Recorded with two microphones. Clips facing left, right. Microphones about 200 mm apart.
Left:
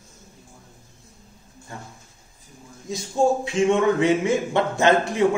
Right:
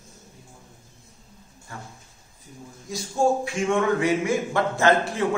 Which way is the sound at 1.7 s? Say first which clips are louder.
Left 1 dB; 20° left (ahead or behind).